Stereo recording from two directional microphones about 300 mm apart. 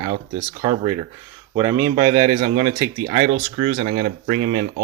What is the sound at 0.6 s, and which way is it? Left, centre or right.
Speech, centre.